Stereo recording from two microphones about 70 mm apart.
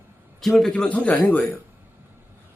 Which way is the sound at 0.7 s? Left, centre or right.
Centre.